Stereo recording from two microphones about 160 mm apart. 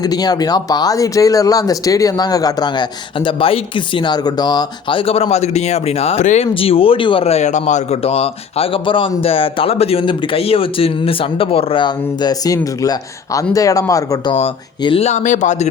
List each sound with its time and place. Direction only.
0.0 s speech: 25° left (ahead or behind); by 6.5 s 45° left (ahead or behind)
6.5 s speech: 35° left (ahead or behind)
14.3 s speech: 35° left (ahead or behind)